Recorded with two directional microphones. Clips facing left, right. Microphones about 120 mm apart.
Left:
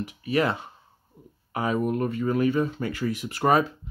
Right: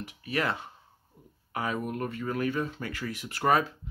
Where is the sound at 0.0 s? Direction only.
20° left (ahead or behind).